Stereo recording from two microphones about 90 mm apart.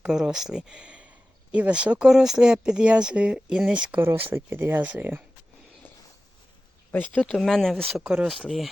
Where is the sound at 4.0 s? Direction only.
25° right (ahead or behind).